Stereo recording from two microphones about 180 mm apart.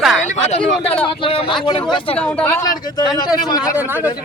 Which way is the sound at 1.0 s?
30° left (ahead or behind).